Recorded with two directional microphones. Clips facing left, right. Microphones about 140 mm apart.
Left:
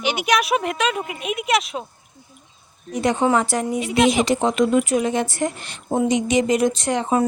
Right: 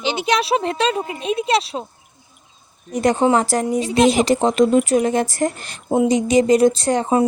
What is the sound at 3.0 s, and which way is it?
Speech, 35° right (ahead or behind).